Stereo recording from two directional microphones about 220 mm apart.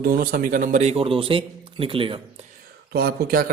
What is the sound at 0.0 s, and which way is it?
A man's voice, 40° right (ahead or behind).